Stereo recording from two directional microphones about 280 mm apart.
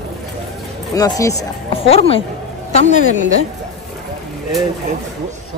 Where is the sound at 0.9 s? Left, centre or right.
Centre.